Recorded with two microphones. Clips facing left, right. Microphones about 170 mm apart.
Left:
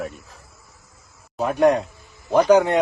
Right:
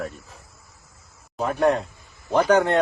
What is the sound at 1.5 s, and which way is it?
Speech, 15° left (ahead or behind).